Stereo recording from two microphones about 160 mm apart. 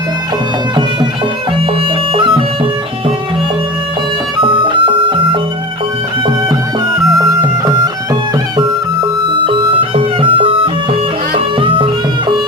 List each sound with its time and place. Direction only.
2.1 s music: 35° right (ahead or behind)
4.4 s music: 30° right (ahead or behind)
7.2 s music: 25° right (ahead or behind)